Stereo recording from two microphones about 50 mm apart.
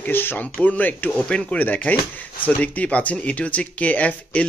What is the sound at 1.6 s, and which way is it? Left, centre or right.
Speech, left.